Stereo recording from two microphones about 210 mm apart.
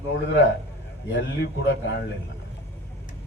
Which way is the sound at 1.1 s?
55° left (ahead or behind).